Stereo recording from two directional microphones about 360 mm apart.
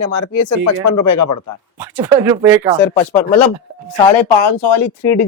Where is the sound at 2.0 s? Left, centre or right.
Centre.